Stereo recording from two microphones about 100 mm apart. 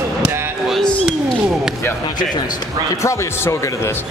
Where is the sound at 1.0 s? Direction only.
5° right (ahead or behind).